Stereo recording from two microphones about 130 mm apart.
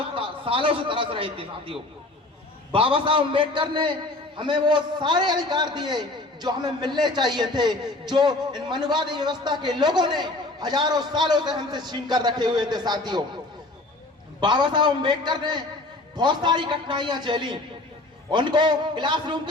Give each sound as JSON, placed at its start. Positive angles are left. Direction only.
{"t": 0.0, "sound": "a man's voice", "side_deg": -45}
{"t": 14.4, "sound": "a man's voice", "side_deg": -35}